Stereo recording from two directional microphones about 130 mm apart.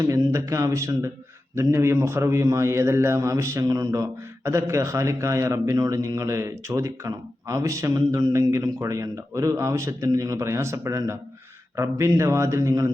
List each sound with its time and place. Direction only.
0.0 s a man's voice: 25° right (ahead or behind)